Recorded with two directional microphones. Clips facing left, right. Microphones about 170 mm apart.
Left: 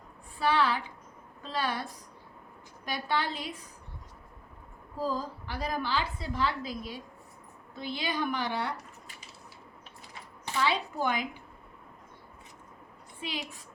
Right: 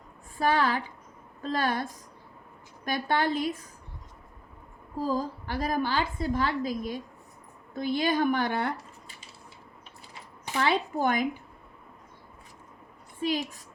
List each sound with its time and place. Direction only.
0.3 s a woman's voice: 45° right (ahead or behind)
5.1 s a woman's voice: 50° right (ahead or behind)
10.6 s a woman's voice: 50° right (ahead or behind)
13.2 s a woman's voice: 45° right (ahead or behind)